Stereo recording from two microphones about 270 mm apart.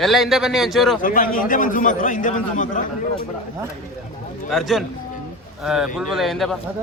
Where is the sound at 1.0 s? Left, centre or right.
Left.